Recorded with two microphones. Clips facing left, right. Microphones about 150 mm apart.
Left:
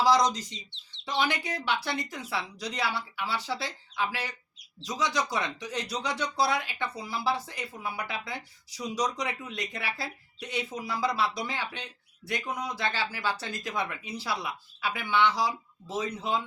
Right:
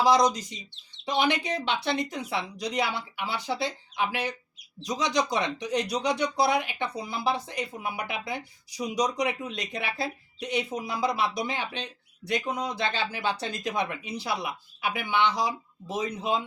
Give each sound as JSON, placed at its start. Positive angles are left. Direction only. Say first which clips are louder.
{"t": 0.0, "sound": "speech", "louder": "right 2 dB", "side_deg": -15}